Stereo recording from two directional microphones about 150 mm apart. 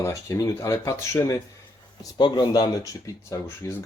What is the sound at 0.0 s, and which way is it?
Speech, 20° left (ahead or behind).